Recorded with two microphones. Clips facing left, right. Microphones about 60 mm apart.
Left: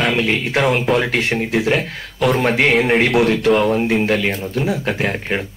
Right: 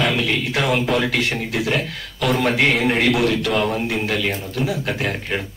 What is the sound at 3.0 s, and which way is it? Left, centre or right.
Speech, left.